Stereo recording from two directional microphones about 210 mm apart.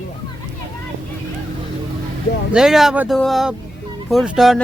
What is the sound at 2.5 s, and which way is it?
Speech, 5° right (ahead or behind).